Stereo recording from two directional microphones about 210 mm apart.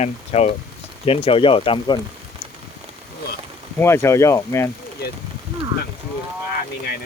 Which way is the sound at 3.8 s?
10° left (ahead or behind).